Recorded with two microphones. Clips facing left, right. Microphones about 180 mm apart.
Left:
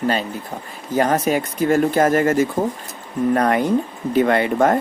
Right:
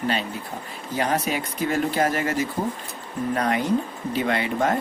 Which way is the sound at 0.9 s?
45° left (ahead or behind).